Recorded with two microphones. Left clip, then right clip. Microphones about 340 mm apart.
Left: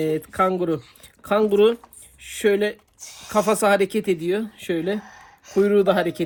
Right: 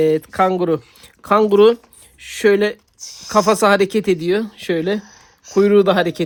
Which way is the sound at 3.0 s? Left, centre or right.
Centre.